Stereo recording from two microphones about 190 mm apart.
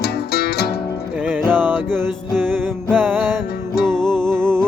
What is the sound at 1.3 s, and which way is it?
Music, 10° right (ahead or behind).